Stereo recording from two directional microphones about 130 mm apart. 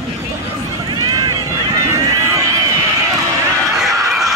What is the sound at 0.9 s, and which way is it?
Run, 35° right (ahead or behind).